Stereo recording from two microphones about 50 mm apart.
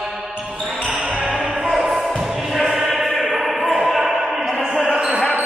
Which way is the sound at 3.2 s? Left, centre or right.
Centre.